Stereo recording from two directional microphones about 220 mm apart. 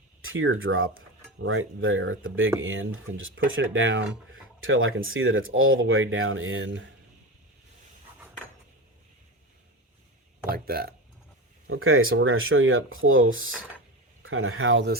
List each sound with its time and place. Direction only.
0.2 s speech: 65° right (ahead or behind)
10.5 s a sound: 45° right (ahead or behind)
11.7 s speech: 70° right (ahead or behind)